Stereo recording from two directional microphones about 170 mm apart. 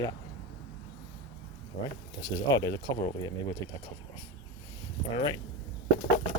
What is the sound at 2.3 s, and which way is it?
Speech, 20° left (ahead or behind).